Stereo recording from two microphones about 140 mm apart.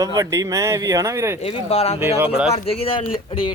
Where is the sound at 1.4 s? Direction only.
50° left (ahead or behind).